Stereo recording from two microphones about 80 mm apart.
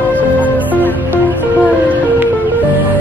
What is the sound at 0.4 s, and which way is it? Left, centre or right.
Music, right.